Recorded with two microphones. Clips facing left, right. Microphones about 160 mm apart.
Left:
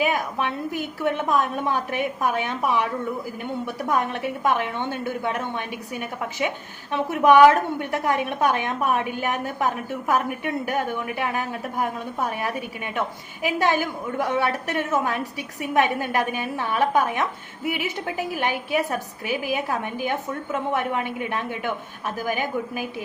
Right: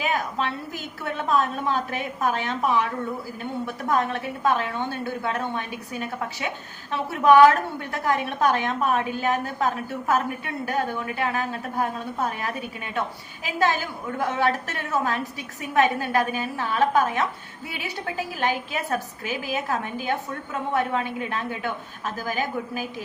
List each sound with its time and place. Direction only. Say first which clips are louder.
0.0 s a woman's voice: left 2 dB; 15° left (ahead or behind)
3.8 s a woman's voice: even; 15° left (ahead or behind)